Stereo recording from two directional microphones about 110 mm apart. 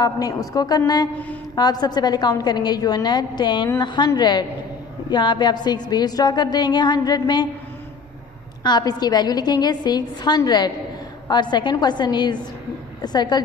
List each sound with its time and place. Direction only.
0.0 s a woman's voice: 35° left (ahead or behind)
8.6 s a woman's voice: 40° left (ahead or behind)